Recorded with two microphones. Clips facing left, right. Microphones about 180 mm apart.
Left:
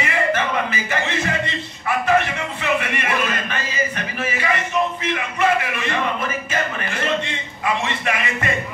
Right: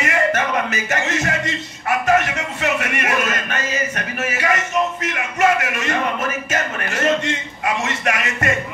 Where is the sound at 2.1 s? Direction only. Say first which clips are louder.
Right 1 dB; 45° right (ahead or behind).